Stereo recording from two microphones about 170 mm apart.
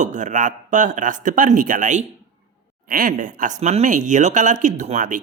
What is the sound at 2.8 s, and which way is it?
Speech, 60° right (ahead or behind).